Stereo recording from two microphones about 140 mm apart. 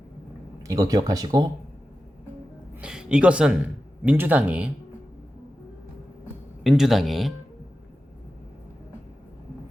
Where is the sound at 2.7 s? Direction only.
5° right (ahead or behind).